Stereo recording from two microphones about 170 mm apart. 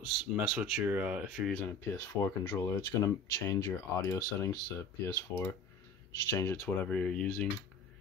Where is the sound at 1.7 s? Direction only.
15° left (ahead or behind).